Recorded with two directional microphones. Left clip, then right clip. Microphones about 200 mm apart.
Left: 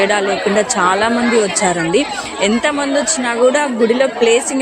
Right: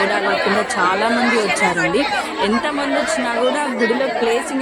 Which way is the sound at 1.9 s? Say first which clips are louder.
Left 2 dB; 20° left (ahead or behind).